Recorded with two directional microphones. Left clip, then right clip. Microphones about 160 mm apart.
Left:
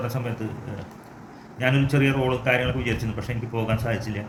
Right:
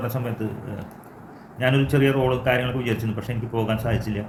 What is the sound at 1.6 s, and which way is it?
A man's voice, 20° right (ahead or behind).